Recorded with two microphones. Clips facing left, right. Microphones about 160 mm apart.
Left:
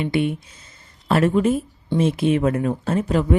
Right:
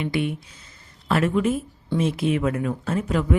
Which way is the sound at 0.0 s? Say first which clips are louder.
Left 4 dB; 25° left (ahead or behind).